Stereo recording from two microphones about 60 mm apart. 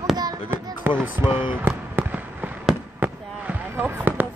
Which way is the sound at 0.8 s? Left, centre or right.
Right.